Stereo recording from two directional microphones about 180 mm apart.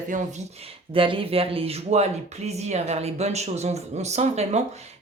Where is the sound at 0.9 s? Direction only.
30° right (ahead or behind).